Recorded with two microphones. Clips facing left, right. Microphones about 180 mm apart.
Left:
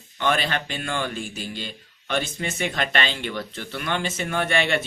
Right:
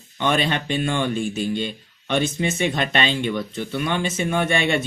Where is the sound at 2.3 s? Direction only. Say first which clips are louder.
Right 5 dB; 20° right (ahead or behind).